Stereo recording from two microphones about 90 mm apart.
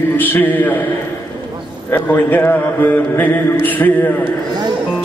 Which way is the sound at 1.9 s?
25° left (ahead or behind).